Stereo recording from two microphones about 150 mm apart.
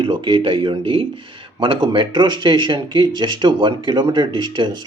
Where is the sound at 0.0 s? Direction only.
35° right (ahead or behind).